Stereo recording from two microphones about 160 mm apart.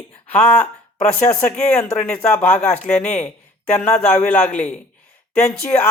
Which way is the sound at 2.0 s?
5° left (ahead or behind).